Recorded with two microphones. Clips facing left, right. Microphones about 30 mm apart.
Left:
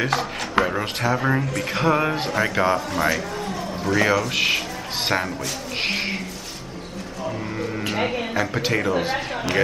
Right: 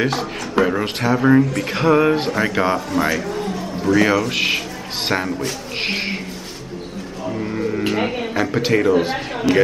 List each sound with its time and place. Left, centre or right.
0.6 s speech: left
1.1 s a man's voice: centre
7.2 s a sound: centre
7.9 s speech: centre